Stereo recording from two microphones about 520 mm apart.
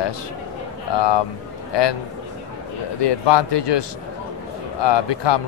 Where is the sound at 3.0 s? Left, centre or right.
Left.